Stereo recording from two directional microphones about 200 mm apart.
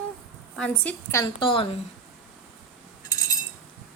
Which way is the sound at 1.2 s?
25° left (ahead or behind).